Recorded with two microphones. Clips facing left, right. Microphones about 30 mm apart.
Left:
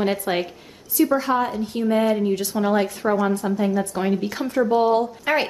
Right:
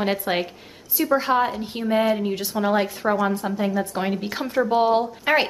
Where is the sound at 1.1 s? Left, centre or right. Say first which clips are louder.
Right 1 dB; right.